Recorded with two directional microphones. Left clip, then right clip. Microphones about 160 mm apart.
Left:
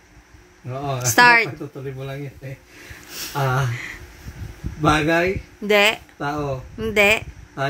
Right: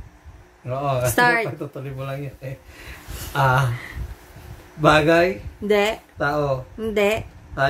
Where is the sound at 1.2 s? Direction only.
10° left (ahead or behind).